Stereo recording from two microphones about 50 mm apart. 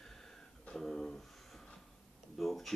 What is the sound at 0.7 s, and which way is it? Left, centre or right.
Speech, centre.